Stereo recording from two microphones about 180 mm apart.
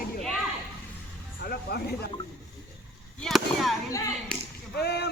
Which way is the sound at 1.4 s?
60° left (ahead or behind).